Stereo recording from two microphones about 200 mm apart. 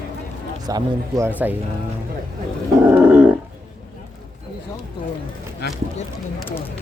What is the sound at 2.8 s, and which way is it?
Roaring cats, 10° right (ahead or behind).